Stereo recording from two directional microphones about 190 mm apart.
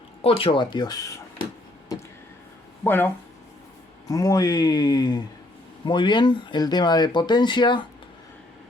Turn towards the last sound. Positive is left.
turn(degrees=25)  # may be behind; listen again after turning